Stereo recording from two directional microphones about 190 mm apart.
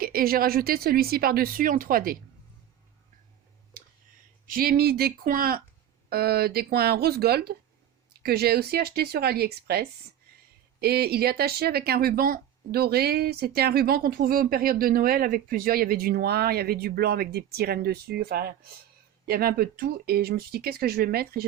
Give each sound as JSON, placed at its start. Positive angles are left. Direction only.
{"t": 0.0, "sound": "speech", "side_deg": -50}
{"t": 4.4, "sound": "speech", "side_deg": -50}